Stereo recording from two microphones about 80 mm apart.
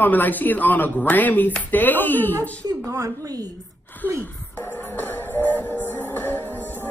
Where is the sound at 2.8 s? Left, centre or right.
Right.